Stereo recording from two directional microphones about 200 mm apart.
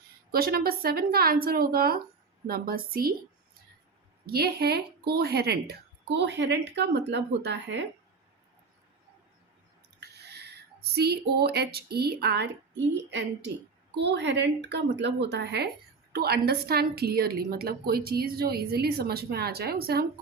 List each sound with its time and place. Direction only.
0.3 s a woman's voice: 50° right (ahead or behind)
4.3 s speech: 50° right (ahead or behind)
10.0 s a woman's voice: 55° right (ahead or behind)